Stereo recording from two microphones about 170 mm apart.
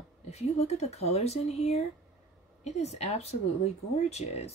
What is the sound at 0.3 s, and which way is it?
Speech, 40° left (ahead or behind).